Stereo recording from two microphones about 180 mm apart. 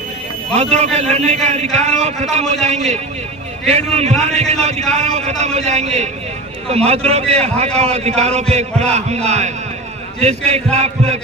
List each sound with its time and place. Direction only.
0.5 s a man's voice: 35° right (ahead or behind)